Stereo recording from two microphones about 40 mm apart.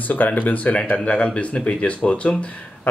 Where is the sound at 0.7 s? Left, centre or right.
Left.